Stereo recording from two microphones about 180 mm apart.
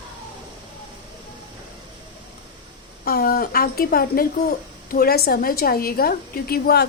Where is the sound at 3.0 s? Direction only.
55° left (ahead or behind).